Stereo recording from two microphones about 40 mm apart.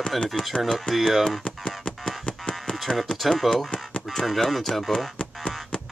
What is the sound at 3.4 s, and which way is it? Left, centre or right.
Speech, centre.